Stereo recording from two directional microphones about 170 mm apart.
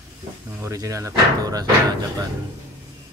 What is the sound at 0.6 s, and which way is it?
Speech, 20° right (ahead or behind).